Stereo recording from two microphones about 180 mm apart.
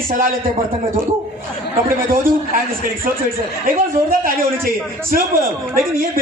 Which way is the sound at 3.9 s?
50° right (ahead or behind).